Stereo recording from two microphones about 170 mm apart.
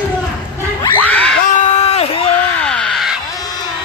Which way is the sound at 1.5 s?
40° left (ahead or behind).